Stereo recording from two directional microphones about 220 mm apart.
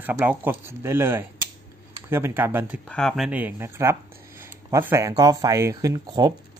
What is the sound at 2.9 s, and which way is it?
Speech, centre (ahead or behind).